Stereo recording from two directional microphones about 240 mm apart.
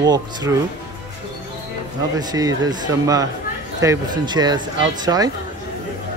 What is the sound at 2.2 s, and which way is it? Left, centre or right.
Speech, centre.